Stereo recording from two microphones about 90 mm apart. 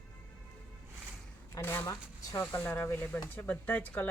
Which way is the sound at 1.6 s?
25° left (ahead or behind).